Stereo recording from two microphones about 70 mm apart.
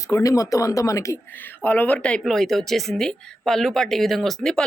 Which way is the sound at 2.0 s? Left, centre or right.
Centre.